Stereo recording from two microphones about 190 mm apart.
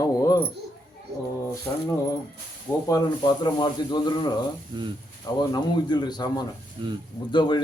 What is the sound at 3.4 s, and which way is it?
Speech, 25° left (ahead or behind).